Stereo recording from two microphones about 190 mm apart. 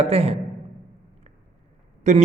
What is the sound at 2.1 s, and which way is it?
Speech, 40° right (ahead or behind).